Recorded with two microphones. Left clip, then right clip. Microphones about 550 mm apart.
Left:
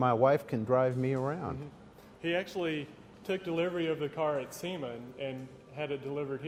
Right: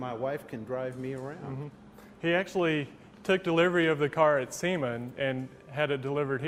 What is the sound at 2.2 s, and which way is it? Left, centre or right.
A man's voice, right.